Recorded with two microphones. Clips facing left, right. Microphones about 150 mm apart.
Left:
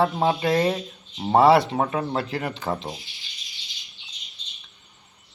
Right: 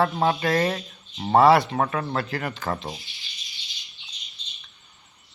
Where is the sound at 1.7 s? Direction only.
15° left (ahead or behind).